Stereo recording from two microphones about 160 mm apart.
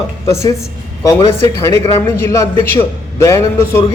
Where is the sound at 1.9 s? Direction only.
15° left (ahead or behind).